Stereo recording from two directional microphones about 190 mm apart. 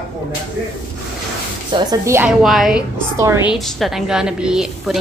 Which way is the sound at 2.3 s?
5° right (ahead or behind).